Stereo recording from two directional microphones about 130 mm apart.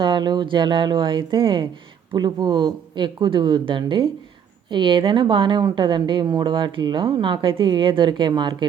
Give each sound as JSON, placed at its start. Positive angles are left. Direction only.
{"t": 0.0, "sound": "a woman's voice", "side_deg": -35}